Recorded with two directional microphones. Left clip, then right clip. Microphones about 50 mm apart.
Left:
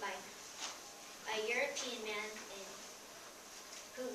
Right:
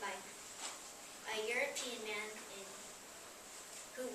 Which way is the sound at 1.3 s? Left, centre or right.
Centre.